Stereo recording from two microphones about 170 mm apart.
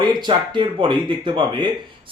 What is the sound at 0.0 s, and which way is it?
Speech, 25° right (ahead or behind).